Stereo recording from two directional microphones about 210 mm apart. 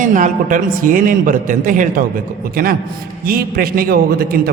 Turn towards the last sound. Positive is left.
turn(degrees=-45)  # may be behind; listen again after turning